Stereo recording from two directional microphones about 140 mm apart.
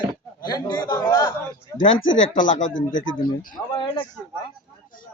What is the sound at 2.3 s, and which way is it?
Speech, 75° left (ahead or behind).